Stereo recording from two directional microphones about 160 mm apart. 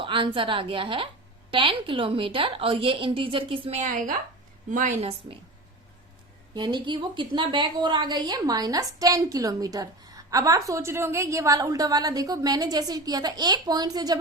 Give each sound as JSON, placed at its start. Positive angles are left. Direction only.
{"t": 0.0, "sound": "a woman's voice", "side_deg": -30}
{"t": 3.8, "sound": "a woman's voice", "side_deg": -55}
{"t": 6.5, "sound": "a woman's voice", "side_deg": -30}